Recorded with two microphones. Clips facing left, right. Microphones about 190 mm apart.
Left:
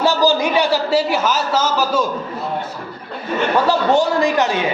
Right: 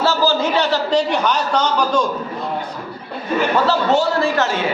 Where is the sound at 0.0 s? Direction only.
15° left (ahead or behind).